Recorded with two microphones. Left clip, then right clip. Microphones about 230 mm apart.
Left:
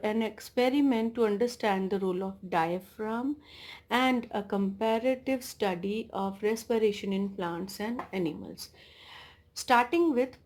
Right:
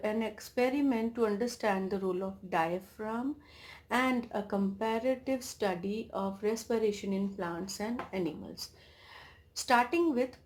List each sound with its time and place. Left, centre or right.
0.0 s speech: left